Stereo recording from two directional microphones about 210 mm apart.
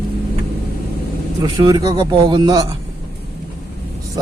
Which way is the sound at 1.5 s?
20° right (ahead or behind).